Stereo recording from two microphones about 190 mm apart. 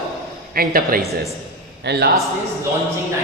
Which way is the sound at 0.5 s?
50° right (ahead or behind).